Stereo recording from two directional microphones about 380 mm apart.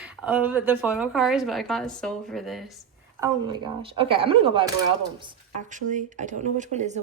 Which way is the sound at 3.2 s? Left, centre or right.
Centre.